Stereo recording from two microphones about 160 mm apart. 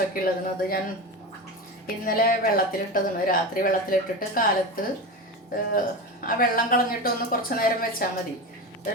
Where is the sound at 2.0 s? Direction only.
65° left (ahead or behind).